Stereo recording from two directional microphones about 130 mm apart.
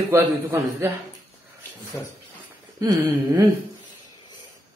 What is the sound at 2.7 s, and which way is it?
Speech, 30° right (ahead or behind).